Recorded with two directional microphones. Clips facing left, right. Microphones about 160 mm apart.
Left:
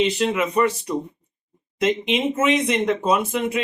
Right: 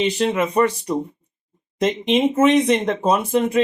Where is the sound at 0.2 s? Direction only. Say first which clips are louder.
Right 2 dB; 35° right (ahead or behind).